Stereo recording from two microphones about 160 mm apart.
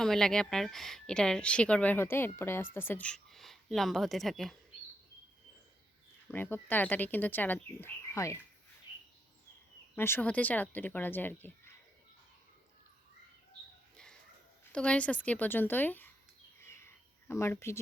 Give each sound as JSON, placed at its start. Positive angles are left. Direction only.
{"t": 0.0, "sound": "a woman's voice", "side_deg": 5}
{"t": 6.2, "sound": "speech", "side_deg": 15}
{"t": 9.9, "sound": "speech", "side_deg": 15}
{"t": 13.9, "sound": "a sound", "side_deg": 5}
{"t": 14.7, "sound": "speech", "side_deg": 5}
{"t": 16.6, "sound": "a sound", "side_deg": 15}